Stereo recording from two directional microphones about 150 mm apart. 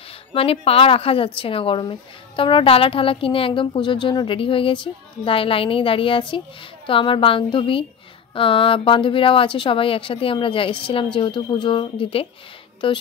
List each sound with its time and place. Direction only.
0.3 s a woman's voice: 40° left (ahead or behind)